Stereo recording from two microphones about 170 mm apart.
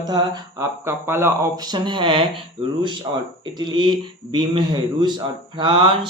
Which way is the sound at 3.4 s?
25° right (ahead or behind).